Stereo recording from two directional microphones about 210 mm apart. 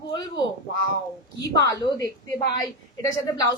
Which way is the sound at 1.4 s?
15° left (ahead or behind).